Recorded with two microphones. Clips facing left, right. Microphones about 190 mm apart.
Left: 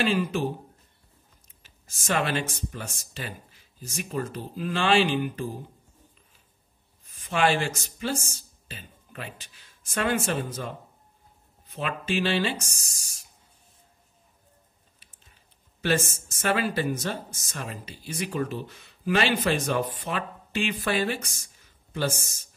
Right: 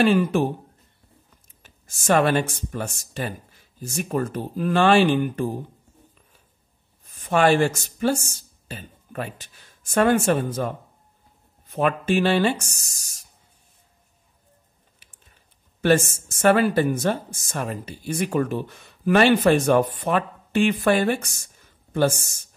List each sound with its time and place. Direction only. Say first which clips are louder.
0.0 s speech: right 7 dB; 55° right (ahead or behind)
1.6 s speech: right 4 dB; 50° right (ahead or behind)
7.1 s speech: right 6 dB; 50° right (ahead or behind)
15.8 s speech: right 7 dB; 55° right (ahead or behind)
21.4 s a sound: right 3 dB; 50° right (ahead or behind)